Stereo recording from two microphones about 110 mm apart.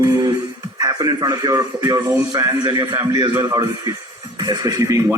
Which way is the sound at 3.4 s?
35° right (ahead or behind).